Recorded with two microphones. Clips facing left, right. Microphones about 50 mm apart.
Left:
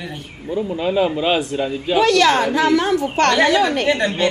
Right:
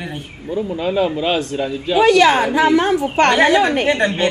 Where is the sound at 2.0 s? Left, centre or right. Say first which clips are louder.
Right 3 dB; centre.